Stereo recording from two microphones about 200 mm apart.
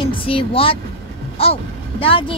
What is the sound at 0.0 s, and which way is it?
Speech, 25° left (ahead or behind).